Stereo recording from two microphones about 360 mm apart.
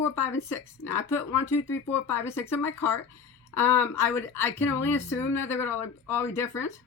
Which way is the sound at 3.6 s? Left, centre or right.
Centre.